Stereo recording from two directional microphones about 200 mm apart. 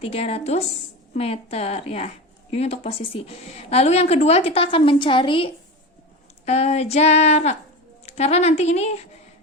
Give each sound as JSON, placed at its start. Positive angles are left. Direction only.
{"t": 0.0, "sound": "a woman's voice", "side_deg": 30}